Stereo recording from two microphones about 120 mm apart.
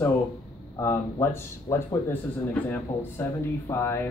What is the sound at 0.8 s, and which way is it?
Speech, 20° left (ahead or behind).